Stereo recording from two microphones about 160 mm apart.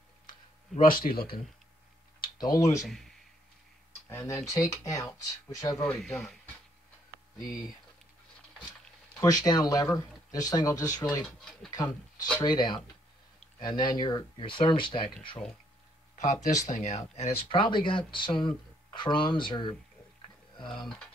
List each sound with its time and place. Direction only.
0.3 s speech: 60° left (ahead or behind)
2.3 s speech: 25° left (ahead or behind)
2.8 s speech: centre (ahead or behind)
4.1 s speech: 15° left (ahead or behind)
5.9 s speech: centre (ahead or behind)
9.2 s speech: 25° left (ahead or behind)
11.0 s speech: 10° left (ahead or behind)
11.7 s speech: 25° left (ahead or behind)
16.6 s speech: 50° left (ahead or behind)
17.5 s speech: 30° left (ahead or behind)
20.5 s a sound: 30° left (ahead or behind)